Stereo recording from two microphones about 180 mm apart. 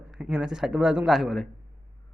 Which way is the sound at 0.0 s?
5° right (ahead or behind).